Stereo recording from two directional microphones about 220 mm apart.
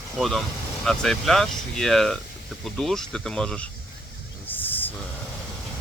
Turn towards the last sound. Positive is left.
turn(degrees=10)  # may be behind; listen again after turning